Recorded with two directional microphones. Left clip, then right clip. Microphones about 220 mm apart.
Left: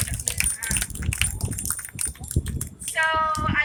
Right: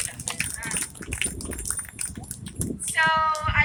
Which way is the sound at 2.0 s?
35° left (ahead or behind).